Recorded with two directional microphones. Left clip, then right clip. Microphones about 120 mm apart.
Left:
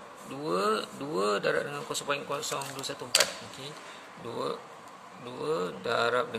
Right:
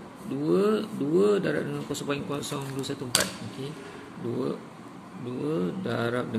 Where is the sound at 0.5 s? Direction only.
50° left (ahead or behind); by 2.9 s 30° left (ahead or behind).